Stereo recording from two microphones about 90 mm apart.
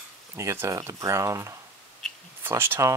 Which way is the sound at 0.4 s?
35° right (ahead or behind).